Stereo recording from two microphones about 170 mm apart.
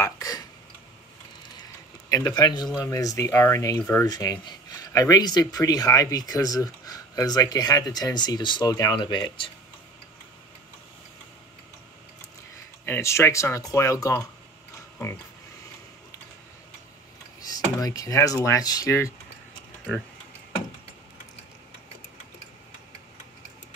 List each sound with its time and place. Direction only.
0.0 s a sound: 20° left (ahead or behind)
2.0 s speech: 20° left (ahead or behind)
12.8 s speech: 15° left (ahead or behind)
17.4 s speech: 20° left (ahead or behind)